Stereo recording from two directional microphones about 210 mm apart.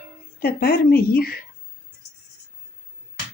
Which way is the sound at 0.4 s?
45° left (ahead or behind).